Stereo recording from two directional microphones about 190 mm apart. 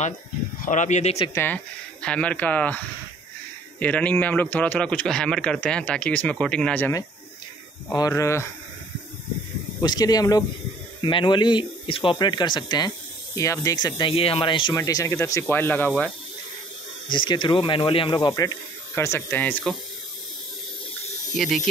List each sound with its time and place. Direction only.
0.6 s speech: 40° left (ahead or behind)
1.3 s a man's voice: 10° left (ahead or behind)
3.8 s a man's voice: 10° left (ahead or behind)
9.8 s a man's voice: 20° left (ahead or behind)
17.1 s speech: 25° left (ahead or behind); by 19.8 s 5° left (ahead or behind)